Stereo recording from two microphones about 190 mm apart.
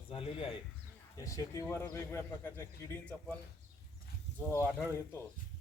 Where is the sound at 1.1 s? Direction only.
15° left (ahead or behind).